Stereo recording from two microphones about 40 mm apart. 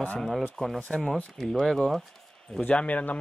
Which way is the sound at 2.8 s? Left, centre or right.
Left.